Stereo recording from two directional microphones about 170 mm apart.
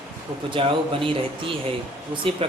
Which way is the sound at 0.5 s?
30° right (ahead or behind).